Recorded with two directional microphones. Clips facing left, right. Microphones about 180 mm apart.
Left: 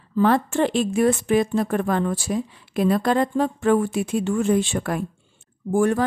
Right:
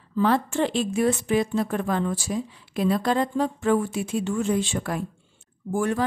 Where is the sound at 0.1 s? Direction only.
50° left (ahead or behind).